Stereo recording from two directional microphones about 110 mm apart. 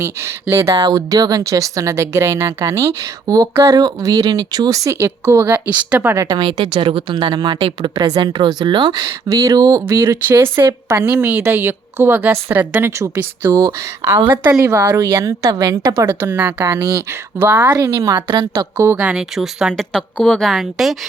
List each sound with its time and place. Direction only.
0.5 s speech: 10° right (ahead or behind)
0.8 s speech: 40° right (ahead or behind); by 6.2 s 20° right (ahead or behind)
6.2 s speech: 40° right (ahead or behind); by 16.6 s 15° right (ahead or behind)
16.7 s speech: 30° right (ahead or behind)
17.4 s speech: 15° right (ahead or behind)
17.7 s speech: 30° right (ahead or behind)
18.8 s speech: 25° right (ahead or behind)
19.0 s a woman's voice: 5° right (ahead or behind)